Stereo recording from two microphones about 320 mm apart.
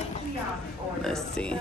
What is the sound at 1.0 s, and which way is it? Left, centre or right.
Speech, centre.